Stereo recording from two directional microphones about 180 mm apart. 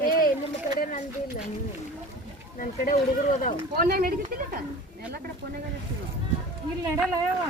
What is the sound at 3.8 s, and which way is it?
Speech, 55° right (ahead or behind).